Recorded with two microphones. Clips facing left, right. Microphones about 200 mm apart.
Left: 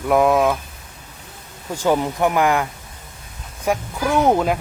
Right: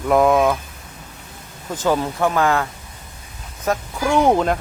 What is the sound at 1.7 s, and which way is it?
Speech, 15° left (ahead or behind).